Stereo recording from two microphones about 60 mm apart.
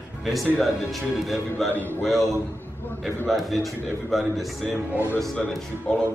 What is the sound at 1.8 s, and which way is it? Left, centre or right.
Speech, left.